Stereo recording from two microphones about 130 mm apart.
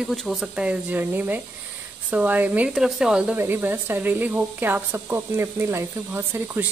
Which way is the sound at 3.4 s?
15° right (ahead or behind).